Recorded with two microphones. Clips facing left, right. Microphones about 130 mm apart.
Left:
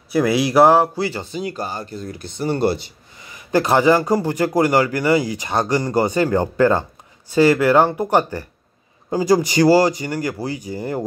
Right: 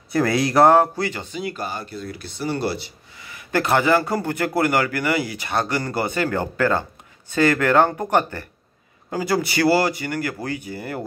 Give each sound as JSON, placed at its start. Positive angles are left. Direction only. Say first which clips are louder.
{"t": 0.1, "sound": "speech", "louder": "left 3 dB", "side_deg": 5}
{"t": 0.9, "sound": "speech", "louder": "left 3 dB", "side_deg": 30}
{"t": 3.5, "sound": "speech", "louder": "left 3 dB", "side_deg": 20}